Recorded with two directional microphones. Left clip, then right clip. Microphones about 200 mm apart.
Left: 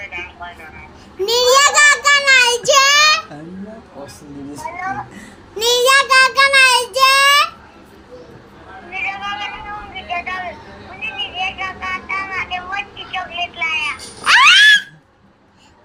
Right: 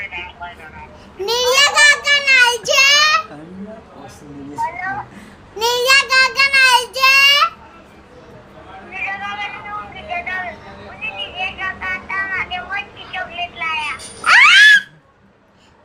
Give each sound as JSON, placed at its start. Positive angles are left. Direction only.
{"t": 0.0, "sound": "vehicle", "side_deg": -15}
{"t": 1.2, "sound": "child singing", "side_deg": -15}
{"t": 5.5, "sound": "child singing", "side_deg": -15}
{"t": 8.9, "sound": "a sound", "side_deg": -15}
{"t": 11.0, "sound": "child singing", "side_deg": -15}
{"t": 13.1, "sound": "a sound", "side_deg": -15}